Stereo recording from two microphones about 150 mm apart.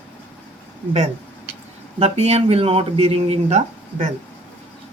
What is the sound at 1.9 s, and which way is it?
Speech, 45° right (ahead or behind).